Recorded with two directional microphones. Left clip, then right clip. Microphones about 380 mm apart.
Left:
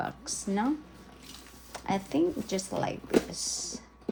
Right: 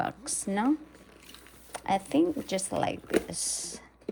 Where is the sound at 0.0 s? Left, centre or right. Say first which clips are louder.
Right 2 dB; centre.